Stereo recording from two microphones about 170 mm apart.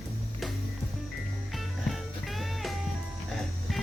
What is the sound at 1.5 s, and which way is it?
Music, centre (ahead or behind).